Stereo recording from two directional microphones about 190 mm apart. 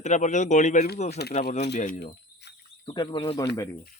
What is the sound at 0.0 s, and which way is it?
A man's voice, 40° left (ahead or behind).